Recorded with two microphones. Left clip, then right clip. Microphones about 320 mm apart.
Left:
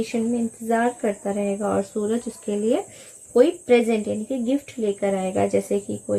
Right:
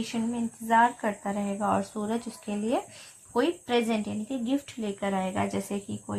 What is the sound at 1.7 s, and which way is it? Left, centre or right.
Speech, centre.